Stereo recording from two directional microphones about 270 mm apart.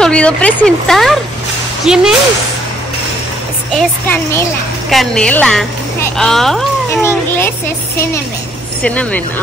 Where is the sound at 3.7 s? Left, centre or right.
Centre.